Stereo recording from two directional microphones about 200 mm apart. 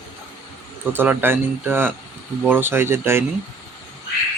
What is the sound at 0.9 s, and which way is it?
Speech, 10° right (ahead or behind).